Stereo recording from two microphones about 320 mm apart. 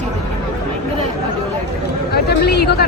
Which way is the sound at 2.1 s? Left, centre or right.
Left.